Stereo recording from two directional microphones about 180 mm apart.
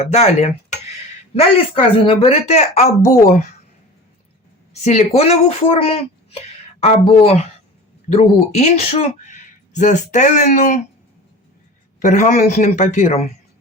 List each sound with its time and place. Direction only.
0.0 s speech: 40° left (ahead or behind)
4.7 s speech: 35° left (ahead or behind)
12.0 s speech: 40° left (ahead or behind)